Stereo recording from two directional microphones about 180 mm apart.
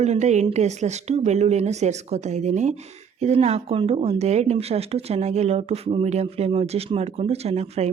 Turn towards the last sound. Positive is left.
turn(degrees=-35)  # may be behind; listen again after turning